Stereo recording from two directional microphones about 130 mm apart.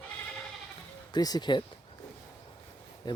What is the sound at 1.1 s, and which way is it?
Speech, 30° left (ahead or behind).